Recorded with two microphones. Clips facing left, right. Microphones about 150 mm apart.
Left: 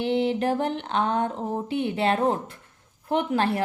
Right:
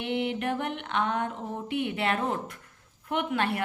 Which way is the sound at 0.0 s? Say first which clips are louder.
Left 6 dB; 30° left (ahead or behind).